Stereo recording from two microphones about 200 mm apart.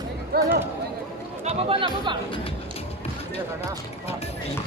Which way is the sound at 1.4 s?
30° right (ahead or behind).